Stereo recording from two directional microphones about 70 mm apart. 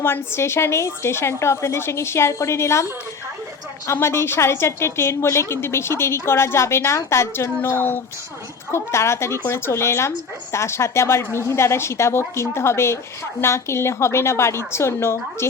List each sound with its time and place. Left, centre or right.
0.0 s a woman's voice: left
3.9 s a woman's voice: left